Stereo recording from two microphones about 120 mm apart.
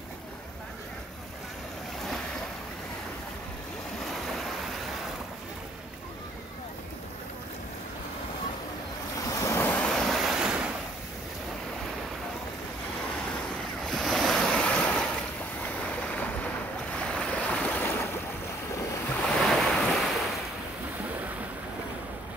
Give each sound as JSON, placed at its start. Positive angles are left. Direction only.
{"t": 9.3, "sound": "waves", "side_deg": 25}
{"t": 9.7, "sound": "waves", "side_deg": 10}
{"t": 13.8, "sound": "waves", "side_deg": 0}
{"t": 19.2, "sound": "waves", "side_deg": 5}